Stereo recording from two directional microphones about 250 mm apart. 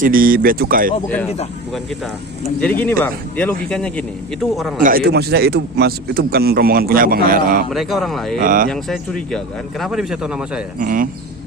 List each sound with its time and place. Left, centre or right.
0.0 s speech: right
1.0 s a man's voice: centre
2.6 s a man's voice: centre
4.8 s speech: right
7.7 s a man's voice: centre
8.4 s speech: right
8.7 s a man's voice: centre
10.8 s speech: right